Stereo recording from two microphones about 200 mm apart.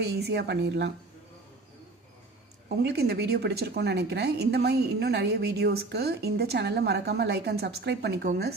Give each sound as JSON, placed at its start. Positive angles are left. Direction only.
{"t": 0.0, "sound": "a woman's voice", "side_deg": -55}
{"t": 2.8, "sound": "a woman's voice", "side_deg": -55}